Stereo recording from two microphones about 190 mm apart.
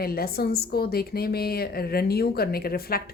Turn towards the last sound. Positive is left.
turn(degrees=50)  # may be behind; listen again after turning